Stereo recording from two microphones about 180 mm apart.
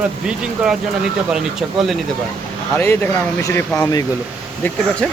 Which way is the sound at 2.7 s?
10° left (ahead or behind).